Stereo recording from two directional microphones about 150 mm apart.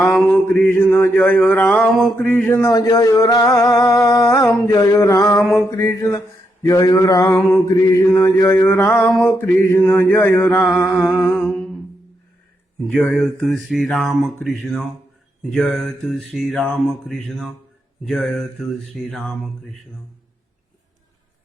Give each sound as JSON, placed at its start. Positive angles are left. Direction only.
{"t": 0.4, "sound": "mantra", "side_deg": 15}
{"t": 1.6, "sound": "mantra", "side_deg": 0}
{"t": 2.1, "sound": "mantra", "side_deg": 10}
{"t": 2.7, "sound": "a sound", "side_deg": 25}
{"t": 5.4, "sound": "mantra", "side_deg": 0}
{"t": 5.7, "sound": "a sound", "side_deg": 20}
{"t": 7.5, "sound": "mantra", "side_deg": 25}
{"t": 8.9, "sound": "mantra", "side_deg": 0}
{"t": 9.4, "sound": "mantra", "side_deg": 15}
{"t": 10.8, "sound": "mantra", "side_deg": 0}
{"t": 12.9, "sound": "mantra", "side_deg": 5}
{"t": 14.6, "sound": "speech", "side_deg": -10}
{"t": 15.4, "sound": "mantra", "side_deg": 5}